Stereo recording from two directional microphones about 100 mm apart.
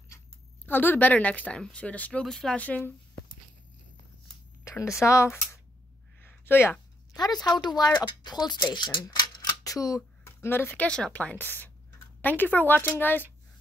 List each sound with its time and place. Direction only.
0.7 s speech: 20° left (ahead or behind)
4.6 s speech: 30° left (ahead or behind)
6.2 s a sound: 20° left (ahead or behind)
7.2 s speech: 40° left (ahead or behind)
9.0 s typewriter: 40° left (ahead or behind); by 10.9 s 20° left (ahead or behind)
10.9 s speech: 10° left (ahead or behind)